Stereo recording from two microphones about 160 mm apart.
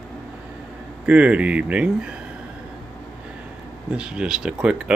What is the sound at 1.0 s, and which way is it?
Speech, 10° right (ahead or behind).